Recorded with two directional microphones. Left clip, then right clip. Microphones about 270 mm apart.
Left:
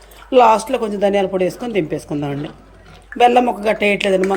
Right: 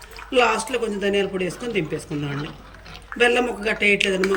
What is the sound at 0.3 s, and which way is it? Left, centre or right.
Speech, centre.